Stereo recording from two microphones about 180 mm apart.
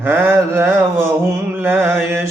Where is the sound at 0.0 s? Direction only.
10° right (ahead or behind).